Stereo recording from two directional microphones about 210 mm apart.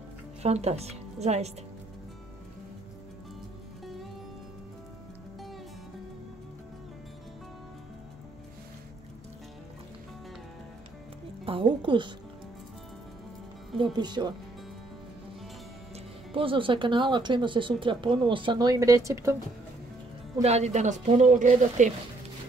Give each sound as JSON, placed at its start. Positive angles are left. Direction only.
{"t": 0.4, "sound": "a woman's voice", "side_deg": -30}
{"t": 11.4, "sound": "speech", "side_deg": -25}
{"t": 13.9, "sound": "speech", "side_deg": -20}
{"t": 16.3, "sound": "speech", "side_deg": -25}
{"t": 20.4, "sound": "speech", "side_deg": -30}